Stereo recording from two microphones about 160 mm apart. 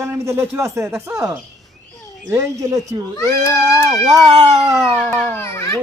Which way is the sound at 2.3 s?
15° right (ahead or behind).